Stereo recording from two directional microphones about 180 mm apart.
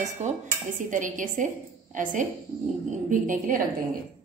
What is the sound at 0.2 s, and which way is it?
A woman's voice, 40° right (ahead or behind).